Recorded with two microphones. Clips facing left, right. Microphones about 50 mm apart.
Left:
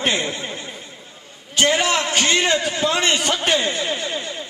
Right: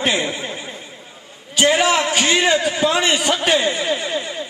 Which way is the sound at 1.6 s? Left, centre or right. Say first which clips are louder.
Right 3 dB; centre.